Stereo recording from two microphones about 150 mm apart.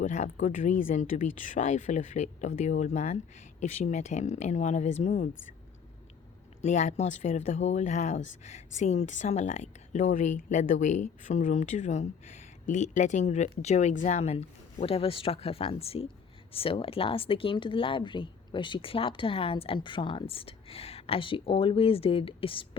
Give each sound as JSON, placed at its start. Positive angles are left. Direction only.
{"t": 0.0, "sound": "speech", "side_deg": 55}
{"t": 6.6, "sound": "speech", "side_deg": 50}